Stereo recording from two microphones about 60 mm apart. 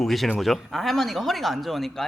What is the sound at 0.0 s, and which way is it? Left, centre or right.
Speech, centre.